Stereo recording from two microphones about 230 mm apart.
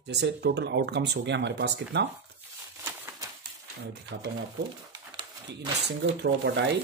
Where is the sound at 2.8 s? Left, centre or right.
Centre.